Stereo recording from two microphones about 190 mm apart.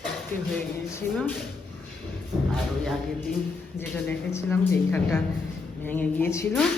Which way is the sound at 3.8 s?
10° left (ahead or behind).